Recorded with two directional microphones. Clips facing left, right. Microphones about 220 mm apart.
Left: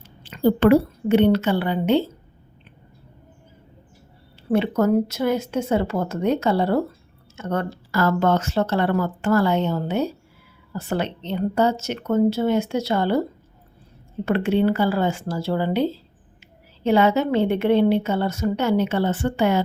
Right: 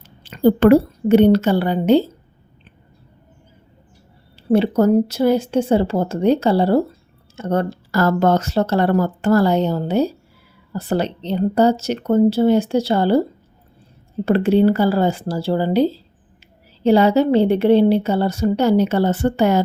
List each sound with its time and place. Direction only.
0.2 s a woman's voice: 40° right (ahead or behind)
4.4 s a woman's voice: 35° right (ahead or behind)
14.3 s a woman's voice: 35° right (ahead or behind)